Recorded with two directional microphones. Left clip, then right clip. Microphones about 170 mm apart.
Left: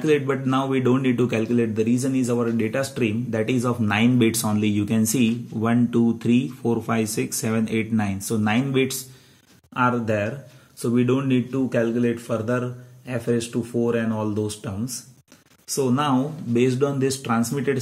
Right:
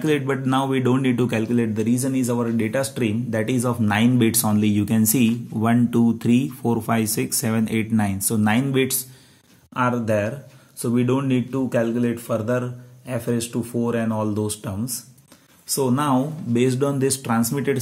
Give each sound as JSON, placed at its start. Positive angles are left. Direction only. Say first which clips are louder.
{"t": 0.0, "sound": "speech", "louder": "left 1 dB", "side_deg": -30}